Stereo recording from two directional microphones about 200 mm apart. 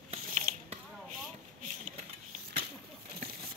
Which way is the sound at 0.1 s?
30° right (ahead or behind).